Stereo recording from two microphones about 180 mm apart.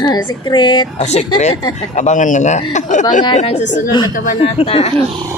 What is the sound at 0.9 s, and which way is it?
Speech, 40° left (ahead or behind).